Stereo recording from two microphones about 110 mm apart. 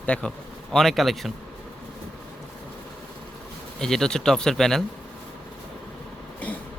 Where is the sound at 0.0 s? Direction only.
10° left (ahead or behind).